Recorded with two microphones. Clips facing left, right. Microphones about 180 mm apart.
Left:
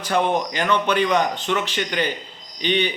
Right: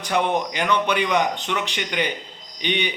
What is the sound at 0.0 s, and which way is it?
A man's voice, 15° right (ahead or behind).